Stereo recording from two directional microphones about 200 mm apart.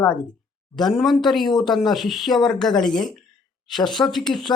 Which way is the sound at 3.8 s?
20° left (ahead or behind).